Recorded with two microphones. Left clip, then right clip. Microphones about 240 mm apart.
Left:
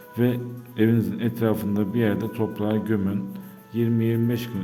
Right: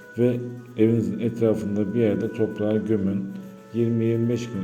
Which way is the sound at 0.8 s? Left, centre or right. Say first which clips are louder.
Right 2 dB; left.